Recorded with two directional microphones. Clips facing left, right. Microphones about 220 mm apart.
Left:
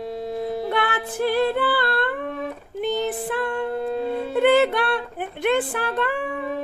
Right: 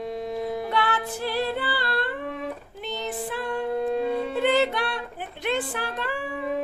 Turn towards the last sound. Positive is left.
turn(degrees=55)  # may be behind; listen again after turning